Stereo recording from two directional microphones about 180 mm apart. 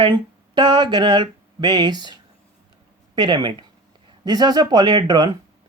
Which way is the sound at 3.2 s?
25° right (ahead or behind).